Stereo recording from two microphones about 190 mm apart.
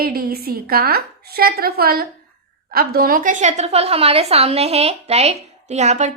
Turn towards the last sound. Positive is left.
turn(degrees=-40)  # may be behind; listen again after turning